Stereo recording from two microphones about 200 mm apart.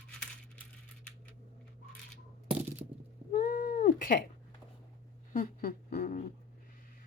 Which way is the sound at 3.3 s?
45° left (ahead or behind).